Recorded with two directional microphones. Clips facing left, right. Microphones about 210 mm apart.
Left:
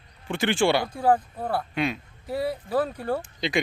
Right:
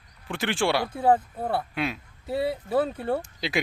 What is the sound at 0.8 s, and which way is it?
Speech, 25° right (ahead or behind).